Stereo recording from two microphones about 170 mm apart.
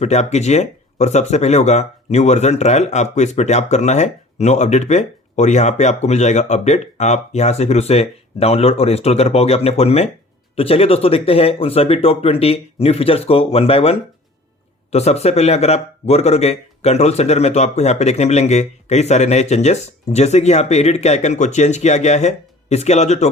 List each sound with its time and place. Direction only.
0.0 s speech: 40° left (ahead or behind)
14.9 s speech: 40° left (ahead or behind)